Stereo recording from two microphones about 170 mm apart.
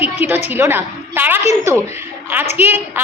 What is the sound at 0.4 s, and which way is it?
A woman's voice, 10° right (ahead or behind).